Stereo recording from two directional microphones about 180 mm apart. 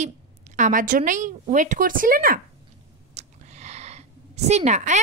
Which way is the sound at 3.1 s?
40° right (ahead or behind).